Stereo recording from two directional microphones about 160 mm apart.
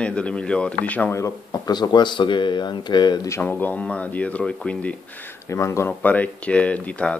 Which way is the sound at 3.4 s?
10° left (ahead or behind).